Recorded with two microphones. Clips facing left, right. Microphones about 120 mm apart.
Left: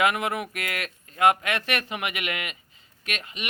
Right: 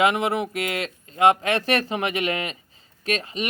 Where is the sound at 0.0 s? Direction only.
25° right (ahead or behind).